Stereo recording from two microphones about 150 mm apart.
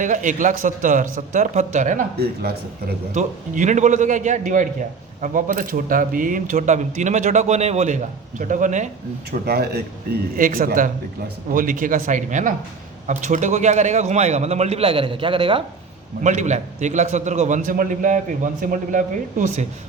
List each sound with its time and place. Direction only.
0.0 s speech: 60° right (ahead or behind); by 2.9 s 90° right
3.2 s speech: 55° right (ahead or behind)
8.4 s speech: 60° right (ahead or behind)
9.5 s a man's voice: 90° right; by 15.6 s 35° right (ahead or behind)
16.2 s a man's voice: 55° right (ahead or behind)